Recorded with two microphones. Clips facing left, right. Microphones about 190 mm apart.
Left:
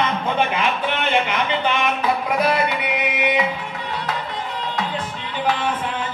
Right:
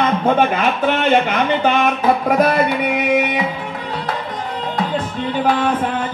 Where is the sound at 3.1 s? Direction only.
45° right (ahead or behind).